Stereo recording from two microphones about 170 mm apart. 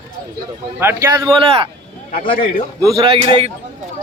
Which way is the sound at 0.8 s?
15° right (ahead or behind).